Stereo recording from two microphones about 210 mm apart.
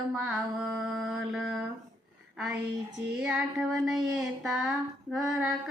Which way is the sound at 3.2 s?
5° right (ahead or behind).